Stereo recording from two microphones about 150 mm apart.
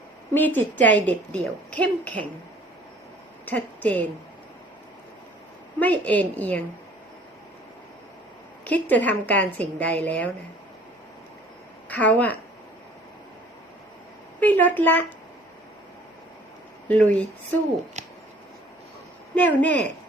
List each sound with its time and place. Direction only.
0.3 s a woman's voice: 10° left (ahead or behind)
3.4 s a woman's voice: 10° left (ahead or behind)
5.8 s a woman's voice: 10° left (ahead or behind)
8.6 s a woman's voice: 10° left (ahead or behind)
11.9 s a woman's voice: 10° left (ahead or behind)
14.4 s a woman's voice: 10° left (ahead or behind)
16.9 s a woman's voice: 10° left (ahead or behind)
18.0 s a sound: 50° right (ahead or behind)
19.3 s speech: 10° left (ahead or behind)